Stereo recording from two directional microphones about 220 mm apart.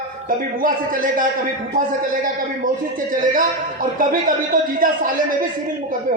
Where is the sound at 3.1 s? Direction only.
35° right (ahead or behind).